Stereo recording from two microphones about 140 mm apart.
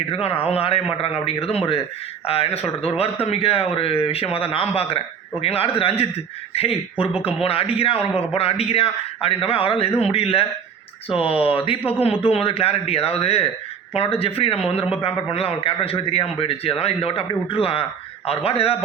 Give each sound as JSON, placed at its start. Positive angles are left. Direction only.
{"t": 0.1, "sound": "a man's voice", "side_deg": 45}